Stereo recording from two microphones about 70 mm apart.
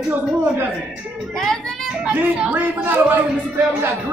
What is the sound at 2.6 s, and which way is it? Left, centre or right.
Speech, right.